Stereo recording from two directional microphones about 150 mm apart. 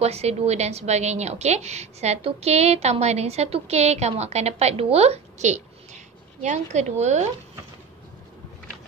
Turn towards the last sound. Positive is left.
turn(degrees=-50)  # may be behind; listen again after turning